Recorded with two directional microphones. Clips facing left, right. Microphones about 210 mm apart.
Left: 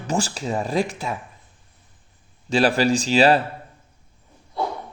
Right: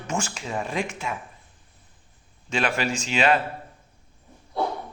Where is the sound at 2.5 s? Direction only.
35° left (ahead or behind).